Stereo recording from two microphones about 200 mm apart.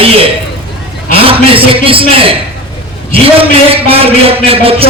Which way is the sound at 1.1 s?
30° right (ahead or behind).